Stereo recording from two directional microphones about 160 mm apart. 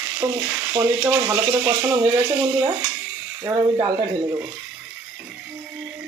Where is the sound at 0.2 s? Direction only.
15° right (ahead or behind).